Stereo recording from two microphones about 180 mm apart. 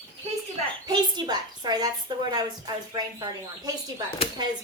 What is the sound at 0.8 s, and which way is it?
A woman's voice, 25° right (ahead or behind).